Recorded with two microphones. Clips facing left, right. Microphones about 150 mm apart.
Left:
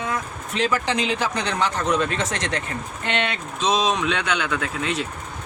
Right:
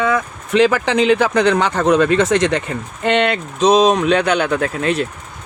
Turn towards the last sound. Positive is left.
turn(degrees=-55)  # may be behind; listen again after turning